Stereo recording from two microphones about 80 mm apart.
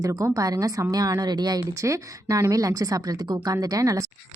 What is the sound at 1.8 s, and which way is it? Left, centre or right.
A woman's voice, right.